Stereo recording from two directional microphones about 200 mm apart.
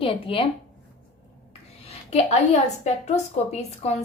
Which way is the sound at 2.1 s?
35° left (ahead or behind).